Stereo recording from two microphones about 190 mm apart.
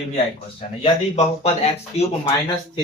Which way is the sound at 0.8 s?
35° left (ahead or behind).